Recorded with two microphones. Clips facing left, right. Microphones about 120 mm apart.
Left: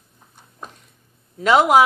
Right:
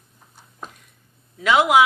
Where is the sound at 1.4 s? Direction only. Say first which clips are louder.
Left 2 dB; 40° left (ahead or behind).